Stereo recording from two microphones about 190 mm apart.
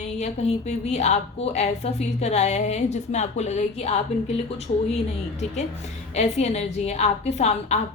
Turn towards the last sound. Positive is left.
turn(degrees=35)  # may be behind; listen again after turning